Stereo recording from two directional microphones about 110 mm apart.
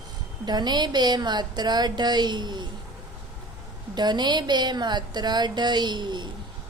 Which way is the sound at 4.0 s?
40° right (ahead or behind).